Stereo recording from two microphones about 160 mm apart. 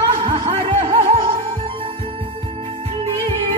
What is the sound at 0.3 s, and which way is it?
Music, 35° right (ahead or behind).